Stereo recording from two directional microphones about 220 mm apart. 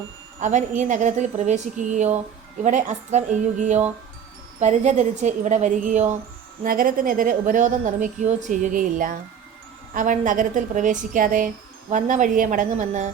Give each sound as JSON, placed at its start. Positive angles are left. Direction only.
{"t": 0.3, "sound": "a woman's voice", "side_deg": -35}